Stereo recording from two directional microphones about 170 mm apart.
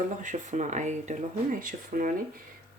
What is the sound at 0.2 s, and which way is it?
Speech, 45° right (ahead or behind).